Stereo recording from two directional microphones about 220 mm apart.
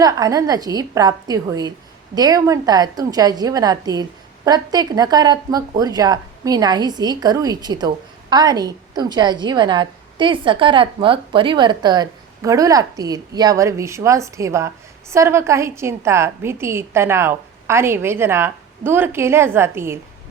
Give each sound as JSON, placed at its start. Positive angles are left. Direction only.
{"t": 0.0, "sound": "speech", "side_deg": -15}